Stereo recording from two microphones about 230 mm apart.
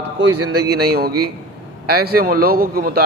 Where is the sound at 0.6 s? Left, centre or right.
Right.